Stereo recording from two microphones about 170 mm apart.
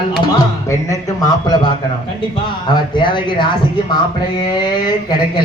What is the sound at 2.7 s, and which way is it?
Speech, 25° left (ahead or behind).